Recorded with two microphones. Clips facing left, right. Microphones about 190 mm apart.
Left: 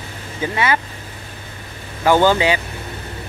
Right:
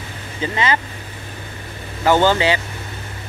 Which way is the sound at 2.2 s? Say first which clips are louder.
Left 1 dB; 15° left (ahead or behind).